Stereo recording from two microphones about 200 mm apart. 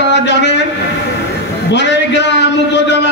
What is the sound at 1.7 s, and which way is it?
A man's voice, 60° left (ahead or behind).